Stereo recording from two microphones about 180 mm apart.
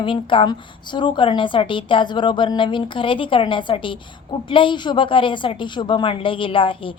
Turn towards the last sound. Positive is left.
turn(degrees=30)  # may be behind; listen again after turning